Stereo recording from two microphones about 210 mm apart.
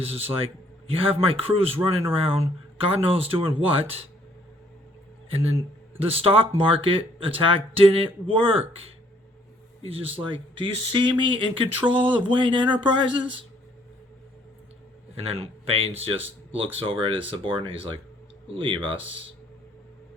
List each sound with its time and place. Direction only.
0.3 s speech: 25° right (ahead or behind)
5.3 s speech: 30° right (ahead or behind)
10.1 s speech: 25° right (ahead or behind)
15.1 s speech: 30° right (ahead or behind)